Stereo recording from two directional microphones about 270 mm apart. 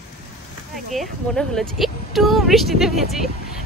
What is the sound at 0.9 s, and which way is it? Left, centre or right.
Speech, centre.